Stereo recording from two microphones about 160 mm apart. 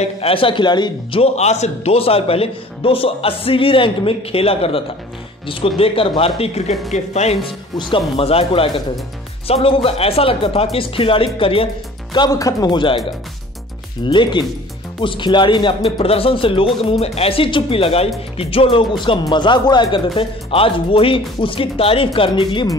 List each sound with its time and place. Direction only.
0.0 s a man's voice: 35° left (ahead or behind)
14.0 s a man's voice: 30° left (ahead or behind)